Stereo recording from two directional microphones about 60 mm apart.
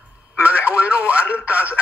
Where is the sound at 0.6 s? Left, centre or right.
Right.